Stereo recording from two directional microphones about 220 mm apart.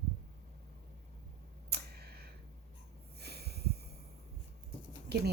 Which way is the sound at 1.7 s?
45° right (ahead or behind).